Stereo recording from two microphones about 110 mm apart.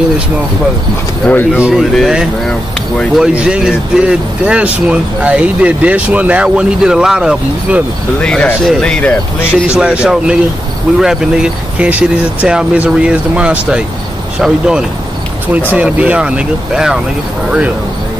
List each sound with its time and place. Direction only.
1.2 s speech: 15° left (ahead or behind)
1.6 s speech: 5° right (ahead or behind)
8.2 s speech: 10° left (ahead or behind)
9.8 s speech: 5° right (ahead or behind)